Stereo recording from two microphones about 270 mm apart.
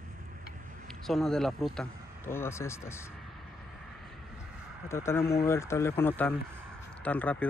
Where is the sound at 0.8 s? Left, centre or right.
Centre.